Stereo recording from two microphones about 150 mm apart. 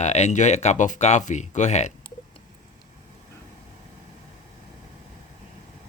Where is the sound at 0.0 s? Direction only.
50° left (ahead or behind).